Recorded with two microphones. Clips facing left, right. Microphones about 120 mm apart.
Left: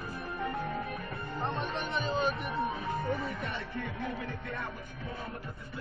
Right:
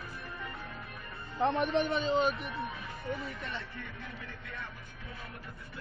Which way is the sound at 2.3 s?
40° left (ahead or behind).